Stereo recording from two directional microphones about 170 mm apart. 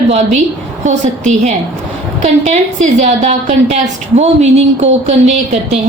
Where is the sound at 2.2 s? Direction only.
45° right (ahead or behind).